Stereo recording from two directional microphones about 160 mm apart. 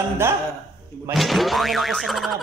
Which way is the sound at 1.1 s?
Centre (ahead or behind).